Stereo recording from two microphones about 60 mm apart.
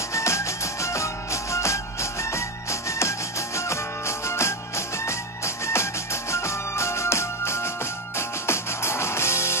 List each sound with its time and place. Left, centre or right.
0.1 s music: left